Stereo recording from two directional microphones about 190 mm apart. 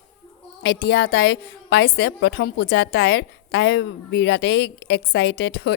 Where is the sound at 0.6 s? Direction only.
60° left (ahead or behind).